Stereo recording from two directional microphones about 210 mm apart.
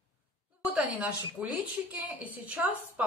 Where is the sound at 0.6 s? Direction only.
5° right (ahead or behind).